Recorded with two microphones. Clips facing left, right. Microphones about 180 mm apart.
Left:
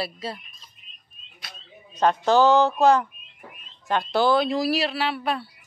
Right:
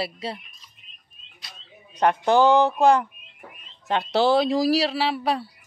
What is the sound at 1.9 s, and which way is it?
Speech, 15° right (ahead or behind).